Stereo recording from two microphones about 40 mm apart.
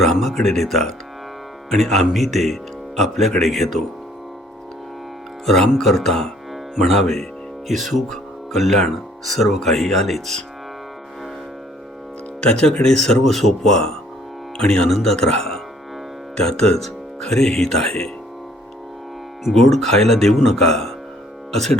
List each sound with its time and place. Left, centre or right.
0.0 s speech: centre
5.8 s speech: centre
12.4 s speech: centre
14.8 s speech: centre
19.5 s speech: centre